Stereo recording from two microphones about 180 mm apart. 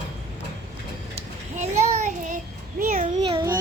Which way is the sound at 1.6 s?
40° right (ahead or behind).